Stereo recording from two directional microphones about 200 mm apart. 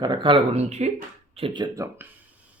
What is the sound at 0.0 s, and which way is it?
Speech, 20° right (ahead or behind).